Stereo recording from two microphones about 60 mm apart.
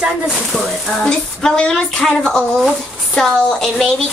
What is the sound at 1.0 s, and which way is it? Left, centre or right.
Speech, centre.